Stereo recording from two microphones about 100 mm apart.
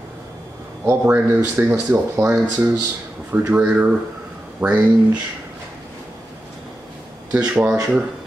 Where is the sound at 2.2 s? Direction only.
30° right (ahead or behind).